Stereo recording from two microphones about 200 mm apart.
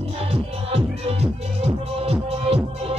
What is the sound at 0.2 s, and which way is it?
Music, 30° right (ahead or behind).